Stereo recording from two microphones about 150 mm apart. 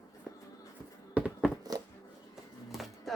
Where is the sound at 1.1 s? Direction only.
10° right (ahead or behind).